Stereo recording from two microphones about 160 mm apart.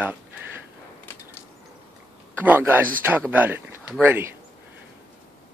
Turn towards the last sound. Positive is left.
turn(degrees=-15)  # may be behind; listen again after turning